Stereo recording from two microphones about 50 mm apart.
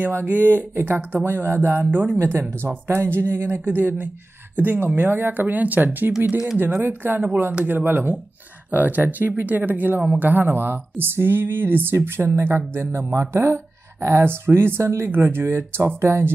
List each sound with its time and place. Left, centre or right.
0.0 s speech: right
1.9 s speech: right
2.1 s speech: right
2.9 s speech: right
3.6 s speech: right
13.1 s speech: right
15.0 s speech: right